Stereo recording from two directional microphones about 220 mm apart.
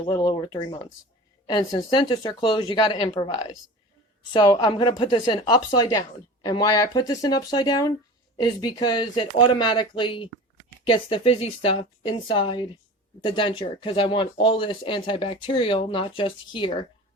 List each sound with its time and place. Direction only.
0.0 s a woman's voice: 20° left (ahead or behind)